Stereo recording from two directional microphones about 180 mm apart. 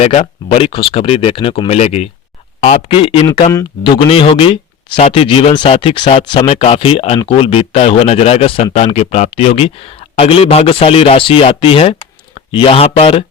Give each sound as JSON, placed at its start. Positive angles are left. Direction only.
{"t": 0.0, "sound": "speech", "side_deg": 35}